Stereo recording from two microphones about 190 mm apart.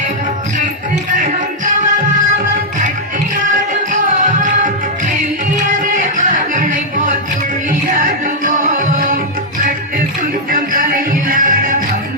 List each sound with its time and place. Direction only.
1.1 s music: 40° right (ahead or behind)
4.2 s music: 40° right (ahead or behind)
10.5 s music: 45° right (ahead or behind)